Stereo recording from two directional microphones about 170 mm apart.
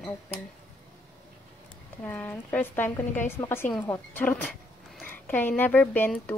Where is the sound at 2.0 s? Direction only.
10° left (ahead or behind).